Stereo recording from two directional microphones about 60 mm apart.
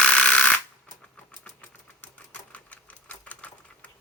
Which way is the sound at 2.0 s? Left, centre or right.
Left.